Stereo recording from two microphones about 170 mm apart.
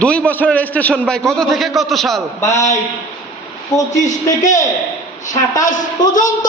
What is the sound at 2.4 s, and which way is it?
Speech, 15° left (ahead or behind).